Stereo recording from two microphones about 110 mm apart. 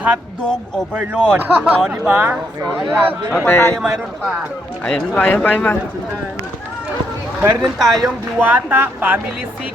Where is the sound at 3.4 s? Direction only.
20° left (ahead or behind).